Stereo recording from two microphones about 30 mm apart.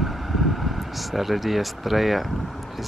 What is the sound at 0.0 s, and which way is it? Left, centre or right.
Vehicle, centre.